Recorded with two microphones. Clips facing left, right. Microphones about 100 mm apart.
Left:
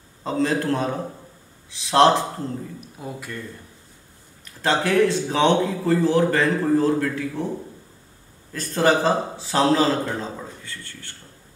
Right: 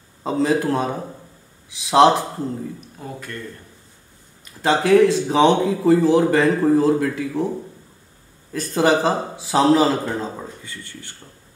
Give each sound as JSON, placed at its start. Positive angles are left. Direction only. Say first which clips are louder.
{"t": 0.2, "sound": "speech", "louder": "right 3 dB", "side_deg": -10}
{"t": 2.8, "sound": "speech", "louder": "even", "side_deg": 5}
{"t": 4.6, "sound": "speech", "louder": "right 5 dB", "side_deg": -10}
{"t": 8.5, "sound": "speech", "louder": "right 2 dB", "side_deg": -15}